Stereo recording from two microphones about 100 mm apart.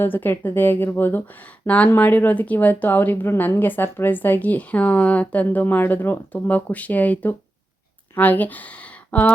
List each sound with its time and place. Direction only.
0.0 s speech: 20° left (ahead or behind)